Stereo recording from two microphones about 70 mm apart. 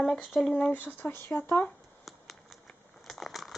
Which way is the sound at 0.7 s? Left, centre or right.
Left.